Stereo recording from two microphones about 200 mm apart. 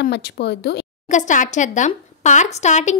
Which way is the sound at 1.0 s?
40° left (ahead or behind).